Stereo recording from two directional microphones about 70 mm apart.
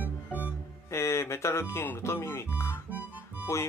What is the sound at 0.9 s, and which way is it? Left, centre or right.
Speech, left.